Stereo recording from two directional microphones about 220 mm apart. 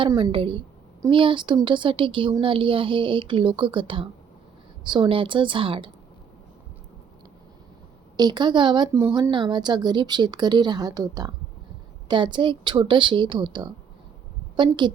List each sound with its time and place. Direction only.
0.0 s speech: 25° right (ahead or behind)
8.1 s a woman's voice: 20° right (ahead or behind)